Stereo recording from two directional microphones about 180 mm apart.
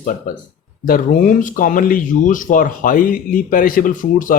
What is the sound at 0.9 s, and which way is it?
Speech, 50° left (ahead or behind).